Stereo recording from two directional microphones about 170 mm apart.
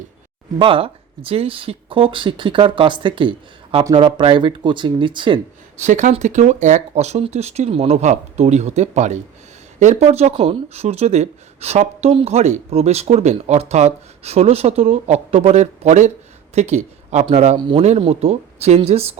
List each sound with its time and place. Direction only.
0.6 s speech: 35° right (ahead or behind)
5.7 s speech: 45° right (ahead or behind)